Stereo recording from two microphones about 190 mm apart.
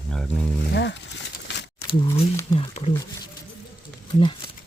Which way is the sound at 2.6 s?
30° left (ahead or behind).